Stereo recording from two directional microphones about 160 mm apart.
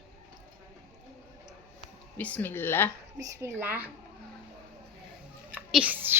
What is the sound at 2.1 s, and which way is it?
Speech, 10° left (ahead or behind).